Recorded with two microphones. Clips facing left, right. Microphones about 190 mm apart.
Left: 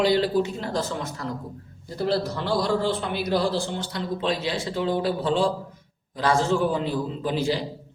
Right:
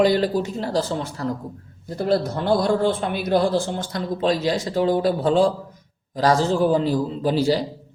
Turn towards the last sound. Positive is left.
turn(degrees=-35)  # may be behind; listen again after turning